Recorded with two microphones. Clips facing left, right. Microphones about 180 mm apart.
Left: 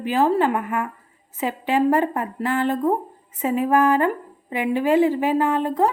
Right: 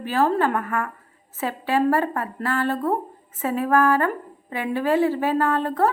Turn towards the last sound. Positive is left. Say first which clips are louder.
# left 1 dB
turn(degrees=15)  # may be behind; listen again after turning